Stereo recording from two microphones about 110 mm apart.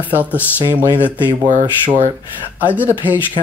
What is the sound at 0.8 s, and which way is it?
Speech, 20° left (ahead or behind).